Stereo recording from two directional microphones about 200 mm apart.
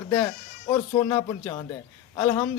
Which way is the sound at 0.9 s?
15° left (ahead or behind).